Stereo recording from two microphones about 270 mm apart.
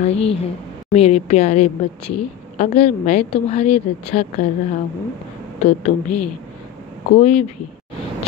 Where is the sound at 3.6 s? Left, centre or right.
Left.